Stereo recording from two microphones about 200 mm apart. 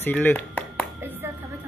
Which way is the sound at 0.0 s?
10° left (ahead or behind).